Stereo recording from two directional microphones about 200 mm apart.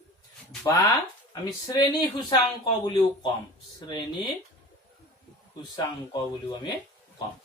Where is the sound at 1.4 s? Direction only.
20° left (ahead or behind).